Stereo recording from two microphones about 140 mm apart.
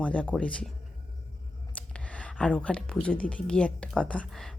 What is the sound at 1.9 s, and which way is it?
Speech, 10° left (ahead or behind).